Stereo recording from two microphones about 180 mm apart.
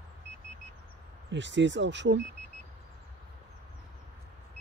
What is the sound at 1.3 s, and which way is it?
Speech, 80° right.